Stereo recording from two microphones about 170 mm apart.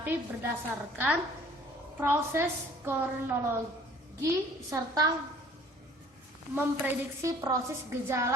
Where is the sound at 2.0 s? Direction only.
15° right (ahead or behind).